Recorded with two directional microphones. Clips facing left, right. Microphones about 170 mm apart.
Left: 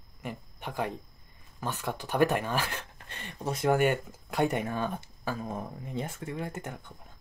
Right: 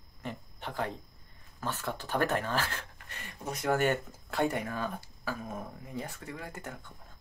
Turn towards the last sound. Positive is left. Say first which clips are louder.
# left 5 dB
turn(degrees=20)  # may be behind; listen again after turning